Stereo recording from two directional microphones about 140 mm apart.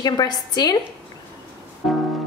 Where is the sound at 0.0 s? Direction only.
30° left (ahead or behind).